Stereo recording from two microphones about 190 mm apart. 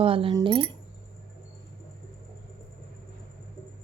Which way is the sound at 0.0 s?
30° right (ahead or behind).